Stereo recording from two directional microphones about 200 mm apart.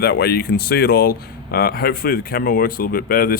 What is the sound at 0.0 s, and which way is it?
Speech, 50° left (ahead or behind).